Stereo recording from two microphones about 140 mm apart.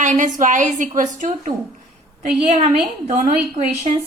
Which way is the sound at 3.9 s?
55° right (ahead or behind).